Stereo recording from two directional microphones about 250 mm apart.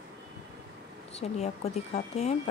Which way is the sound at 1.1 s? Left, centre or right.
Left.